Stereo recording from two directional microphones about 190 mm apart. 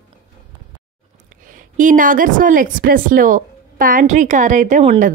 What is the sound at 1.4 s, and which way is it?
A woman's voice, 45° right (ahead or behind).